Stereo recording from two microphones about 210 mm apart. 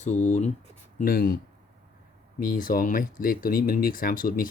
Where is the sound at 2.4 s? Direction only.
40° left (ahead or behind).